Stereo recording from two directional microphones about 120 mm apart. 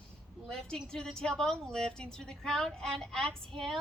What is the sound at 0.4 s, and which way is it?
A woman's voice, 5° left (ahead or behind).